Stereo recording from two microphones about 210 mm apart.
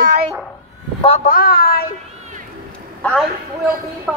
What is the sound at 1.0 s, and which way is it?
Speech, 30° left (ahead or behind).